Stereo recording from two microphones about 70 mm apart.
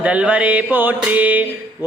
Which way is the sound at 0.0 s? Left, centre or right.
Centre.